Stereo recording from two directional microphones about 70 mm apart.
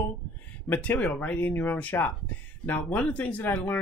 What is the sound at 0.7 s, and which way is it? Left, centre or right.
Speech, left.